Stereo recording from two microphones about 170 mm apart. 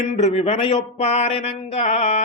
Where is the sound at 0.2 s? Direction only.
40° left (ahead or behind).